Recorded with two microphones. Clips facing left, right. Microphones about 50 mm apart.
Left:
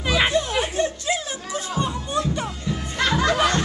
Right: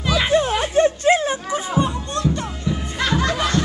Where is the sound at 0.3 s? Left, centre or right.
Right.